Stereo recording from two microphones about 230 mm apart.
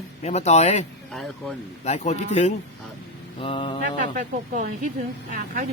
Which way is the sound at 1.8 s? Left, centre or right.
Left.